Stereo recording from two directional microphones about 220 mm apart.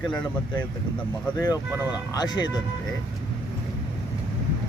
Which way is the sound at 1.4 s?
15° left (ahead or behind).